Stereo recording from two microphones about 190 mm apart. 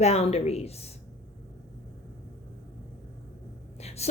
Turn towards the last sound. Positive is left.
turn(degrees=35)  # may be behind; listen again after turning